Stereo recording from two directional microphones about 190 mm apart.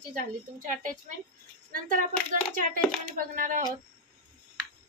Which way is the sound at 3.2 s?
45° right (ahead or behind).